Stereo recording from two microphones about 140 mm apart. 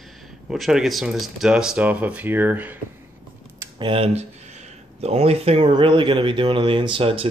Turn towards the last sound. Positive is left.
turn(degrees=-40)  # may be behind; listen again after turning